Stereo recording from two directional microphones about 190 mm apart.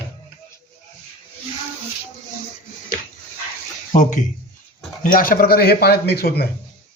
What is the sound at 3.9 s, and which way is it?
A man's voice, 40° left (ahead or behind).